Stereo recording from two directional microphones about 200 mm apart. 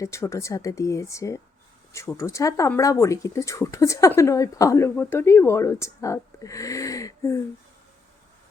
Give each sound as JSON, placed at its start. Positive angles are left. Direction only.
{"t": 0.0, "sound": "speech", "side_deg": 15}